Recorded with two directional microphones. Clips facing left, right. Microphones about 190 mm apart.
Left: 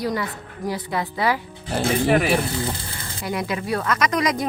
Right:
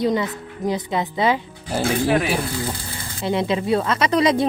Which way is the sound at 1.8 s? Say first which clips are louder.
Even; centre (ahead or behind).